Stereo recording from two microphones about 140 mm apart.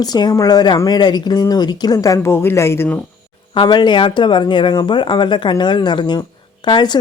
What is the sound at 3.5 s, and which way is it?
Speech, 35° left (ahead or behind).